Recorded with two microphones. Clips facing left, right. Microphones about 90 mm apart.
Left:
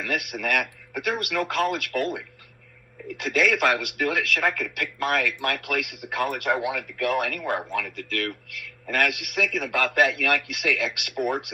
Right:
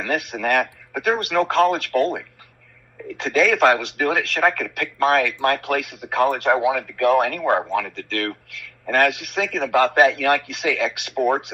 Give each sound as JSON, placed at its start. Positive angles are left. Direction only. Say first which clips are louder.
{"t": 0.1, "sound": "speech", "louder": "right 6 dB", "side_deg": -30}